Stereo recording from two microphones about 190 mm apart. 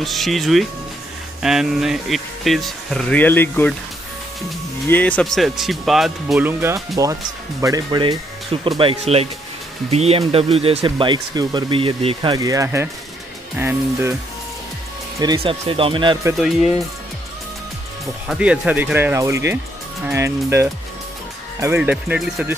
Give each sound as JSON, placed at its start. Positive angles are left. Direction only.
{"t": 0.0, "sound": "speech", "side_deg": 0}
{"t": 4.8, "sound": "speech", "side_deg": 10}
{"t": 7.0, "sound": "speech", "side_deg": -15}
{"t": 15.1, "sound": "speech", "side_deg": -15}
{"t": 15.4, "sound": "speech", "side_deg": -30}
{"t": 18.2, "sound": "speech", "side_deg": -5}